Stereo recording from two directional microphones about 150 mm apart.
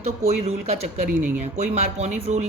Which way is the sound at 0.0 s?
45° right (ahead or behind).